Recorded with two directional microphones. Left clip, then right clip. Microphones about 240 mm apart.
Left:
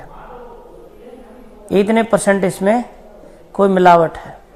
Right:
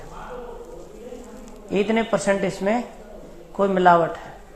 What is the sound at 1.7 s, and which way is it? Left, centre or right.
A man's voice, left.